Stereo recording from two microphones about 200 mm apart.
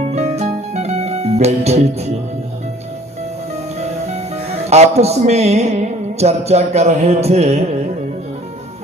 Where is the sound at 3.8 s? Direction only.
35° right (ahead or behind).